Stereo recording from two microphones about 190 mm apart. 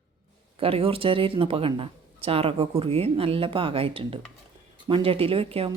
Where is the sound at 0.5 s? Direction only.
30° right (ahead or behind).